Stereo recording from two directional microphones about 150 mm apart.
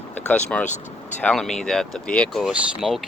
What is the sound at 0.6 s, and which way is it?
Speech, 50° left (ahead or behind).